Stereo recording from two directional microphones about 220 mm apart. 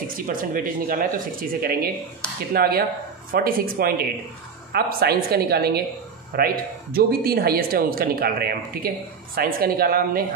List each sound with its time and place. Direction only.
0.1 s speech: 40° right (ahead or behind)